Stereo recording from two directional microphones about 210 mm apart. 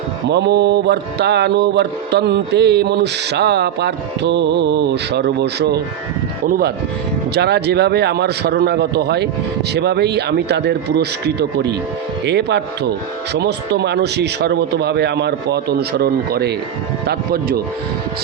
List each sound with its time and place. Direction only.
0.3 s mantra: 55° right (ahead or behind)
12.2 s speech: 55° right (ahead or behind)
13.3 s mantra: 50° right (ahead or behind)